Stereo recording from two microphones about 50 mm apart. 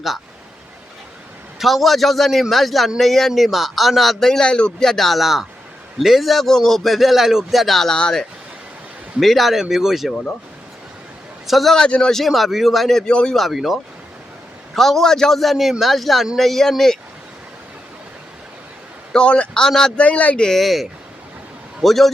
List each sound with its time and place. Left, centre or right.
1.5 s a man's voice: centre
9.2 s a man's voice: centre
11.4 s a man's voice: centre
11.9 s speech: centre
12.1 s a man's voice: centre
13.1 s speech: centre
13.3 s a man's voice: centre
14.8 s a man's voice: centre
19.1 s speech: left
20.0 s speech: left
20.6 s a man's voice: centre
21.8 s a man's voice: centre